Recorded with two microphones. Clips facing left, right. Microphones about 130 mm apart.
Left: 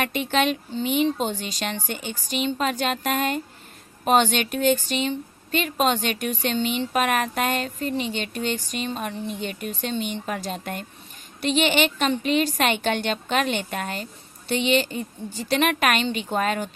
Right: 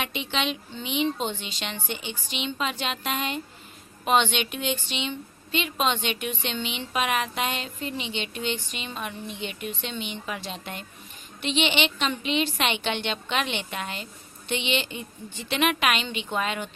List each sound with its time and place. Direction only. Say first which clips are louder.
0.0 s a woman's voice: left 6 dB; 45° left (ahead or behind)